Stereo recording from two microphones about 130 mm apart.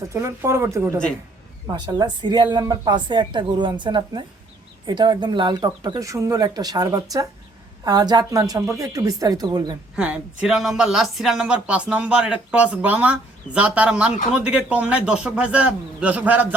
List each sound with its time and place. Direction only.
0.1 s speech: 20° right (ahead or behind)
1.7 s speech: 35° right (ahead or behind)
9.9 s speech: 10° right (ahead or behind)